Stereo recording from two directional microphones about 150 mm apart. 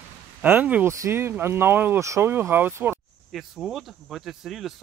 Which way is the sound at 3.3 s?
Centre (ahead or behind).